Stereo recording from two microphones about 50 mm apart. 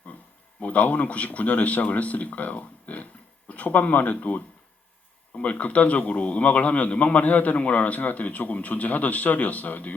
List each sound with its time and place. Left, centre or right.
0.6 s a man's voice: left